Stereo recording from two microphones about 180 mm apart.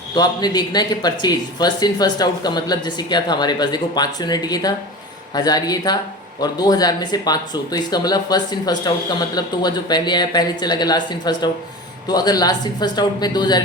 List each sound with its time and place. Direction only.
0.1 s speech: 25° left (ahead or behind)